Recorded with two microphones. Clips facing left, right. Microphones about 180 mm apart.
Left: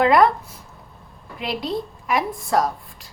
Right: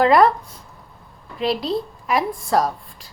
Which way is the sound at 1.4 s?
Centre (ahead or behind).